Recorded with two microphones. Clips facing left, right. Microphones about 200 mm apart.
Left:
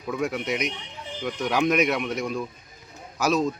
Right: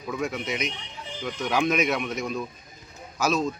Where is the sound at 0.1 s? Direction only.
5° left (ahead or behind).